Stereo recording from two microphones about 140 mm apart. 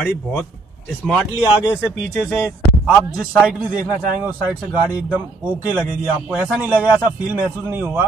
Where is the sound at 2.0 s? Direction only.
Centre (ahead or behind).